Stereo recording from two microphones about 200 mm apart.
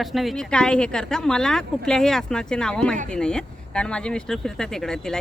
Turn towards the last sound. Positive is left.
turn(degrees=0)  # may be behind; listen again after turning